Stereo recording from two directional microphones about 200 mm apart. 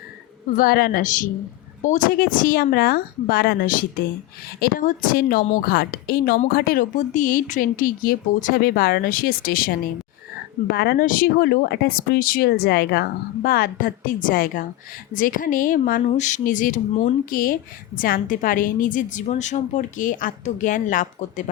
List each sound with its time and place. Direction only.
0.5 s speech: 45° left (ahead or behind)